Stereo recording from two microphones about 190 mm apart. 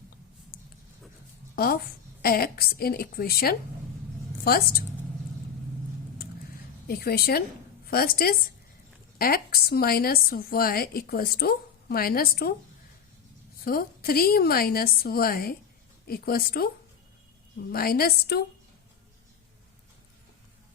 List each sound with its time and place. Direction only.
1.5 s a woman's voice: 55° left (ahead or behind)
6.8 s a woman's voice: 55° left (ahead or behind)
13.7 s a woman's voice: 50° left (ahead or behind)
17.7 s a woman's voice: 50° left (ahead or behind)